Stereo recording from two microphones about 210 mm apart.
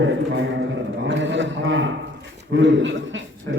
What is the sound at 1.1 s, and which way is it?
A man's voice, 60° right (ahead or behind).